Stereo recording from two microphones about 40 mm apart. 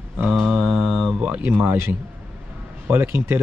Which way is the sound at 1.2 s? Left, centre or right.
Right.